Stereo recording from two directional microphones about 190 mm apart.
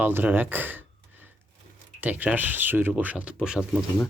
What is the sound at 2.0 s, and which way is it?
Speech, 10° right (ahead or behind).